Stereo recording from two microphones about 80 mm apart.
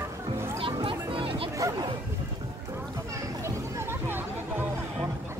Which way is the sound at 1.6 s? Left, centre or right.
Right.